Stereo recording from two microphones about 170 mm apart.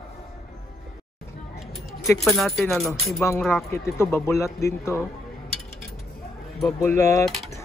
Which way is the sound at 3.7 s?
15° left (ahead or behind).